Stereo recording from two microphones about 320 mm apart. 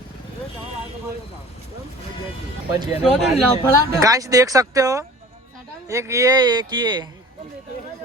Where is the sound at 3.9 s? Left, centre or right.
Centre.